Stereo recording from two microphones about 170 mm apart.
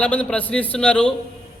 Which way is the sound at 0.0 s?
10° left (ahead or behind).